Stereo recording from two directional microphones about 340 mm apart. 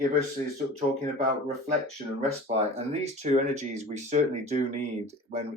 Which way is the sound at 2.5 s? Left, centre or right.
Centre.